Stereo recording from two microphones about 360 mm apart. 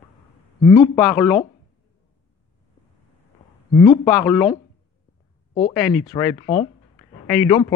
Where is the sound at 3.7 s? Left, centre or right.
Centre.